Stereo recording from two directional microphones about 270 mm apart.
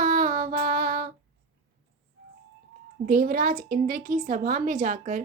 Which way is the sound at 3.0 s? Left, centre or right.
Right.